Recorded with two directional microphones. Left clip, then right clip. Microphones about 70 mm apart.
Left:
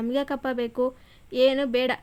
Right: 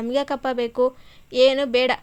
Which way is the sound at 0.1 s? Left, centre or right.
Centre.